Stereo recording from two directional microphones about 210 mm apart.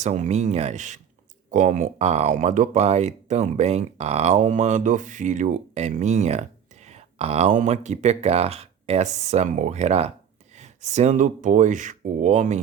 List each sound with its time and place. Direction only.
0.0 s speech: 35° right (ahead or behind)